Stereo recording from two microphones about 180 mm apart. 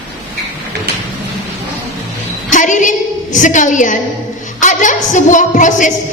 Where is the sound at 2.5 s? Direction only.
45° left (ahead or behind).